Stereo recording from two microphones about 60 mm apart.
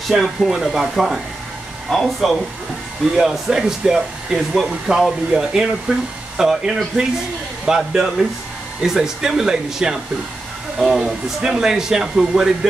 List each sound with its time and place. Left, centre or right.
0.1 s speech: centre